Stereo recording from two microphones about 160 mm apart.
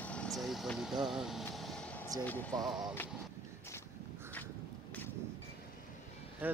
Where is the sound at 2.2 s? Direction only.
10° left (ahead or behind).